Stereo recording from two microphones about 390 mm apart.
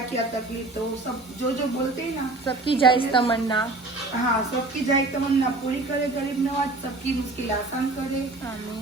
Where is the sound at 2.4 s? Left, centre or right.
Centre.